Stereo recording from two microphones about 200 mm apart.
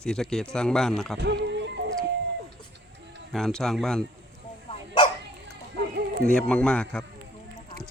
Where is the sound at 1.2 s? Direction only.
60° right (ahead or behind).